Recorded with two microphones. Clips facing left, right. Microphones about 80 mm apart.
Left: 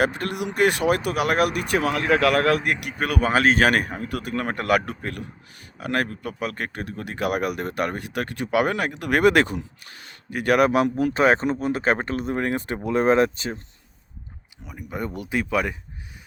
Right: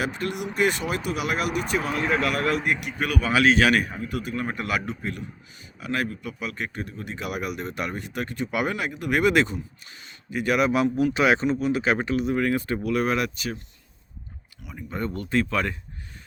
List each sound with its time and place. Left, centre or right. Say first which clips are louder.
0.0 s speech: left 4 dB; left
2.8 s speech: left 3 dB; left
10.9 s speech: left 2 dB; left
14.6 s speech: even; centre